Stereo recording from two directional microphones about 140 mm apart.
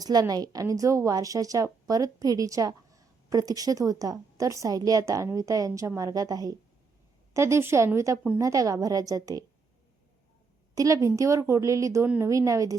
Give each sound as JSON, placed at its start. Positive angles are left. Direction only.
{"t": 0.0, "sound": "a woman's voice", "side_deg": -25}
{"t": 10.8, "sound": "a woman's voice", "side_deg": -25}